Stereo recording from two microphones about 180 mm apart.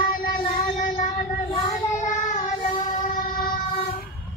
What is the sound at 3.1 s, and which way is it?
Train, 55° left (ahead or behind).